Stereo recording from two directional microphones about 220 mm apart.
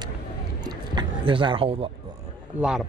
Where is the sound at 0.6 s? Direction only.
20° right (ahead or behind).